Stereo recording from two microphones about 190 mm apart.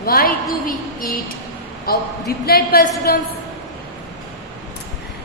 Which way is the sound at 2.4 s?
55° left (ahead or behind).